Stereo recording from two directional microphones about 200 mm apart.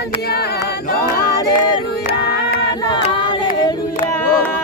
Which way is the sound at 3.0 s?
25° left (ahead or behind).